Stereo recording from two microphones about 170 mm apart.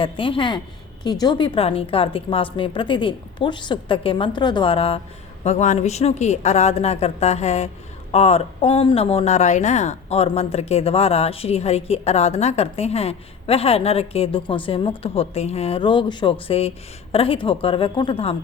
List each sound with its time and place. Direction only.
0.0 s a woman's voice: 30° left (ahead or behind)